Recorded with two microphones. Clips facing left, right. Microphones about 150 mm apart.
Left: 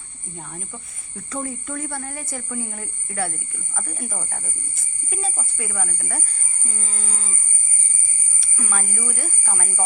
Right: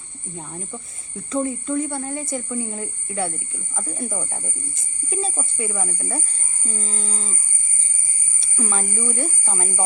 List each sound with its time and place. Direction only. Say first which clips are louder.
0.3 s speech: right 3 dB; 30° right (ahead or behind)
8.4 s speech: right 4 dB; 25° right (ahead or behind)